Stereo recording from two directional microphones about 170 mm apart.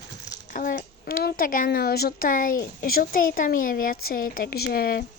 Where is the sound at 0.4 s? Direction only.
50° left (ahead or behind).